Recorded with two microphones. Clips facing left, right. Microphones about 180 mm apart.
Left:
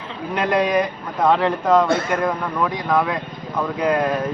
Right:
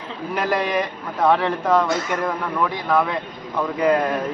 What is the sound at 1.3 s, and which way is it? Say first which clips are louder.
Speech: left 1 dB; 10° left (ahead or behind).